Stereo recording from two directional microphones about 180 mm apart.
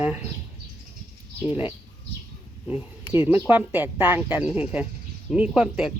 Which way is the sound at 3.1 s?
15° right (ahead or behind).